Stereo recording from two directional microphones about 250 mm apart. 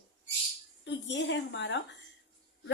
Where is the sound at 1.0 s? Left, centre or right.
Left.